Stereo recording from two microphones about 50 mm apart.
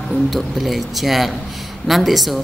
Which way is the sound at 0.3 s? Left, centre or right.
Centre.